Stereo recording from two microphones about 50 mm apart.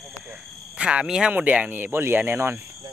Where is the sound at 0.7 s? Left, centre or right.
Right.